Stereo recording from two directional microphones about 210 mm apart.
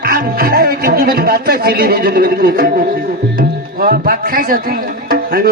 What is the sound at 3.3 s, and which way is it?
Speech, 45° right (ahead or behind).